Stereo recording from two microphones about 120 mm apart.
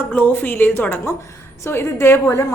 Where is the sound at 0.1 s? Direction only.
15° left (ahead or behind).